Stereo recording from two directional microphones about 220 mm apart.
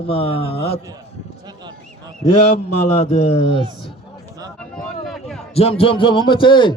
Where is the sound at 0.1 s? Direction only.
25° left (ahead or behind).